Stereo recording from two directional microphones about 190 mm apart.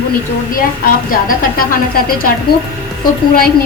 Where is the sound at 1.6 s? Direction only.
50° left (ahead or behind).